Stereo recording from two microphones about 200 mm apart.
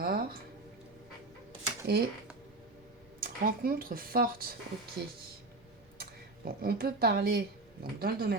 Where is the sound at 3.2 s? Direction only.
45° right (ahead or behind).